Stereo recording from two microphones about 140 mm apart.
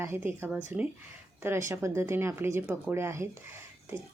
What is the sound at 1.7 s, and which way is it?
Speech, 20° right (ahead or behind).